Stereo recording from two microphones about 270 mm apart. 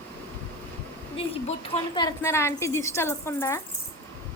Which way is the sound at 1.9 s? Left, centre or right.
Centre.